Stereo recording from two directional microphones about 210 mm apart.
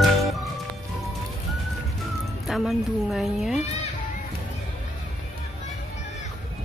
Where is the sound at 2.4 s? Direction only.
Centre (ahead or behind).